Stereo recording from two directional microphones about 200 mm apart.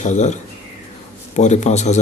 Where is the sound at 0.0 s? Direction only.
35° left (ahead or behind).